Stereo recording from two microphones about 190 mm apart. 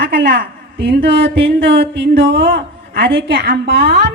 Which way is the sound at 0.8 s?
65° right (ahead or behind).